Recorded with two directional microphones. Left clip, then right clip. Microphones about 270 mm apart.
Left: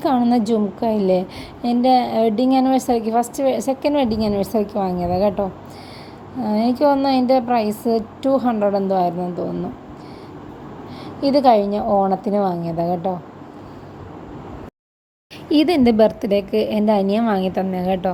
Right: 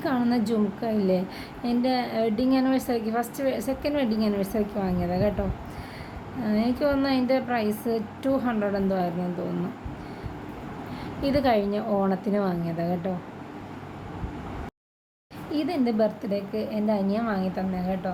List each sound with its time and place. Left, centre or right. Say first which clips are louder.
0.0 s a woman's voice: left 8 dB; left
6.4 s a woman's voice: left 8 dB; left
11.2 s a woman's voice: left 9 dB; centre
15.5 s a woman's voice: left 11 dB; left